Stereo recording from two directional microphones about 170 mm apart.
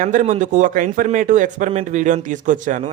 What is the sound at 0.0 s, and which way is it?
A man's voice, 45° right (ahead or behind).